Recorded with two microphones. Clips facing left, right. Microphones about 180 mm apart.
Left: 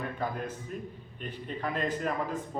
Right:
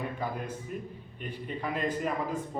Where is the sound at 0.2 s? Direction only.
10° right (ahead or behind).